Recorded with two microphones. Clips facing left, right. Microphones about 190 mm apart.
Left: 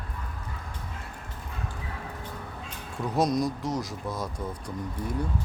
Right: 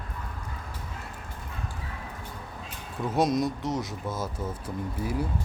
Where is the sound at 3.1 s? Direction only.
Centre (ahead or behind).